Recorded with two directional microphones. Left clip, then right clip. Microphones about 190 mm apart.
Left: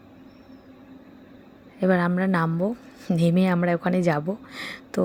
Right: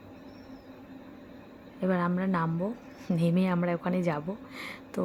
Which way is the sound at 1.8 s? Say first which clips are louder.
Left 7 dB; 30° left (ahead or behind).